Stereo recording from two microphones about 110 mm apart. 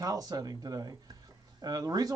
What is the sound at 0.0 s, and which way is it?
Speech, 35° right (ahead or behind).